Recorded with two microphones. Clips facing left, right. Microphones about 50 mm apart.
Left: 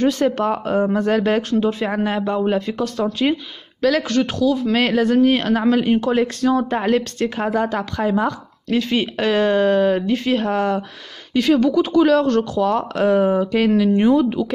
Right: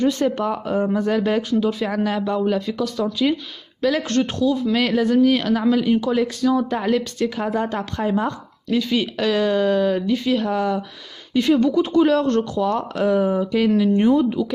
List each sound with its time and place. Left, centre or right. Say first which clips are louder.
0.0 s speech: left 2 dB; left
1.6 s speech: left 1 dB; left
2.8 s speech: left 1 dB; left
3.8 s speech: left 2 dB; left
4.7 s speech: left 2 dB; left
5.2 s speech: left 1 dB; left
8.0 s speech: left 2 dB; left
8.6 s speech: left 1 dB; left
11.3 s speech: left 1 dB; left
12.7 s speech: left 3 dB; left